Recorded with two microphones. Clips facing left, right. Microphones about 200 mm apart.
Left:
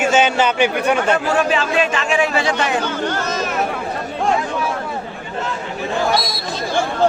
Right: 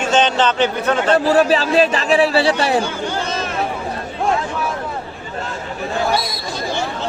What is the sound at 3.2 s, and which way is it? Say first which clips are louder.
Chatter: left 2 dB; 30° right (ahead or behind).